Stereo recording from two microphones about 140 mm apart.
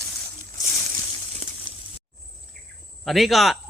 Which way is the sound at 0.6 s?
25° left (ahead or behind).